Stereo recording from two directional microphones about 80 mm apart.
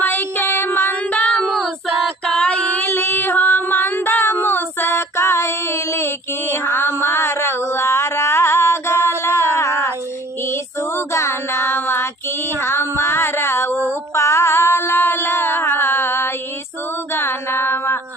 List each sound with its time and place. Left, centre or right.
0.0 s child singing: left
1.1 s child singing: centre
1.5 s child singing: centre
2.2 s female singing: centre; by 6.1 s left
6.5 s a sound: left
10.5 s child singing: left
14.2 s a sound: left
17.2 s music: left